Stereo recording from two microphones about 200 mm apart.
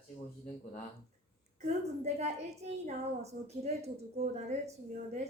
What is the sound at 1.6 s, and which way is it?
A woman's voice, 35° right (ahead or behind).